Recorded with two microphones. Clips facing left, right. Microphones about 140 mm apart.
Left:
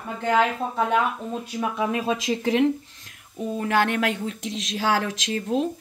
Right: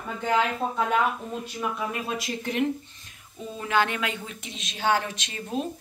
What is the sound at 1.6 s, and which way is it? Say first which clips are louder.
A woman's voice: left 6 dB; 90° left.